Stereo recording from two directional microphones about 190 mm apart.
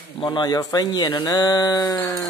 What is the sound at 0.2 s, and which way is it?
Speech, 25° left (ahead or behind).